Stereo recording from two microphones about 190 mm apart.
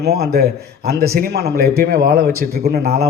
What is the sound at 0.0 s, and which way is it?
A man's voice, 55° right (ahead or behind).